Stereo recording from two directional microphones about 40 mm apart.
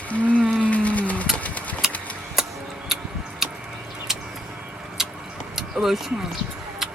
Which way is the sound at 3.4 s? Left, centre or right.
Centre.